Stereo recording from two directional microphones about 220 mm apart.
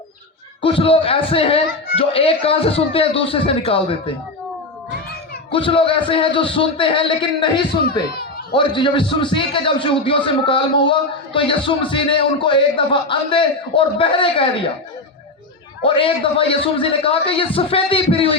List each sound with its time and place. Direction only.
0.6 s a man's voice: 25° left (ahead or behind)
5.5 s a man's voice: 25° left (ahead or behind)
7.7 s speech: 45° left (ahead or behind)
8.5 s a man's voice: 20° left (ahead or behind)
15.8 s a man's voice: 25° left (ahead or behind)